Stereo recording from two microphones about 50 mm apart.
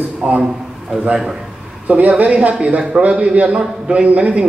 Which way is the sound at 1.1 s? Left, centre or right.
Centre.